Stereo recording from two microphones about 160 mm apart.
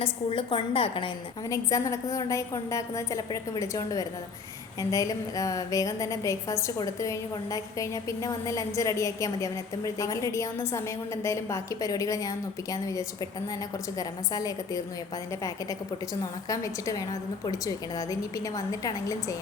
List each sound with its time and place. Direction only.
0.0 s a woman's voice: 35° left (ahead or behind)
1.5 s a woman's voice: 20° left (ahead or behind)
16.2 s a woman's voice: 20° left (ahead or behind)